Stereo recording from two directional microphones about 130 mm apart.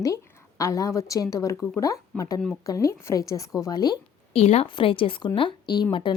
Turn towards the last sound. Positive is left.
turn(degrees=35)  # may be behind; listen again after turning